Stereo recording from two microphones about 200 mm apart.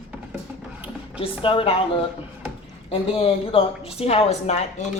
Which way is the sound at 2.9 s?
30° left (ahead or behind).